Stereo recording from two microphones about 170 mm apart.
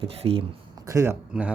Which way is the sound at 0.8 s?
15° right (ahead or behind).